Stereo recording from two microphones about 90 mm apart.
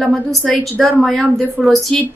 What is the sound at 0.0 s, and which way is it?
A woman's voice, 5° left (ahead or behind).